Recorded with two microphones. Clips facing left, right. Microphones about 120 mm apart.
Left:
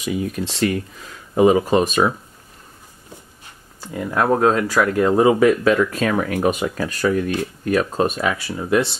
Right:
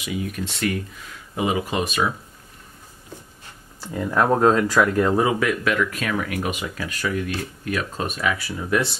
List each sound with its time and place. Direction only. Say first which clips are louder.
0.0 s speech: left 5 dB; 30° left (ahead or behind)
1.3 s speech: left 9 dB; 40° left (ahead or behind)
3.8 s speech: left 1 dB; 10° left (ahead or behind)
5.1 s speech: left 6 dB; 30° left (ahead or behind)